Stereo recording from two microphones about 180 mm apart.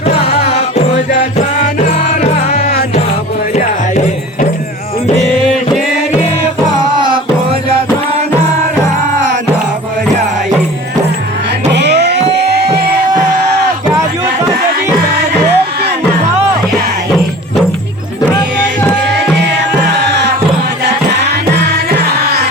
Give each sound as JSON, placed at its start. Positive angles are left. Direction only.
{"t": 0.0, "sound": "music", "side_deg": 35}
{"t": 2.2, "sound": "music", "side_deg": 40}
{"t": 11.7, "sound": "a sound", "side_deg": -70}
{"t": 12.3, "sound": "music", "side_deg": -70}
{"t": 15.5, "sound": "music", "side_deg": -65}
{"t": 21.5, "sound": "music", "side_deg": -70}